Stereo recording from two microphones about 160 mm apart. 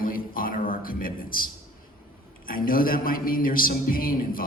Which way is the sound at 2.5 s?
60° left (ahead or behind).